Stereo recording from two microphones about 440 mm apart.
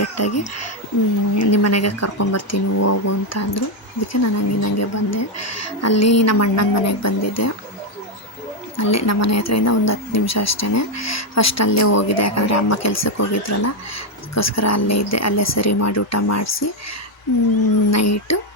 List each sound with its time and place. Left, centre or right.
0.0 s a woman's voice: left
8.7 s a woman's voice: left
17.9 s a woman's voice: left